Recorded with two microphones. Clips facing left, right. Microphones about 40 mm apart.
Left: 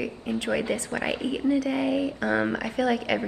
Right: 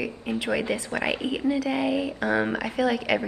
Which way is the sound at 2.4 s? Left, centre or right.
Centre.